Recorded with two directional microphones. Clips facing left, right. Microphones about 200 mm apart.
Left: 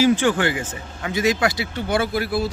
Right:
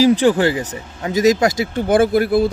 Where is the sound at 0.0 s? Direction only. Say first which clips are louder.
Right 5 dB; 35° right (ahead or behind).